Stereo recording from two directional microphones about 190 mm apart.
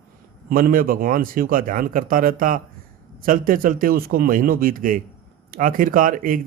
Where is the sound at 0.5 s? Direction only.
50° right (ahead or behind).